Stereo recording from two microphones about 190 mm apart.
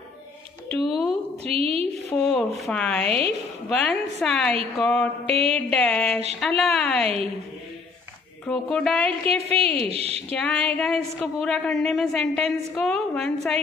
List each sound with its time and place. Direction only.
0.8 s a man's voice: centre (ahead or behind)
1.4 s a woman's voice: 30° right (ahead or behind)
2.0 s a man's voice: centre (ahead or behind)
8.5 s a man's voice: 5° left (ahead or behind)
9.2 s a woman's voice: 30° right (ahead or behind)
10.3 s a man's voice: 5° left (ahead or behind)